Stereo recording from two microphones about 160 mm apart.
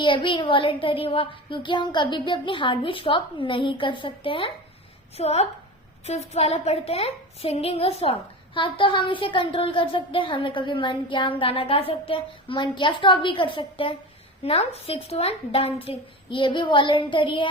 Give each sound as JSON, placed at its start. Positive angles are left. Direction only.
{"t": 0.0, "sound": "speech", "side_deg": 30}